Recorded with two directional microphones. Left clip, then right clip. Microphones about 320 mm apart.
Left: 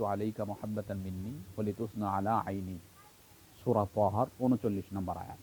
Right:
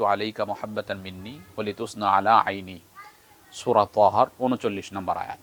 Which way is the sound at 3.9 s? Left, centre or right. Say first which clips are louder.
Right 11 dB; centre.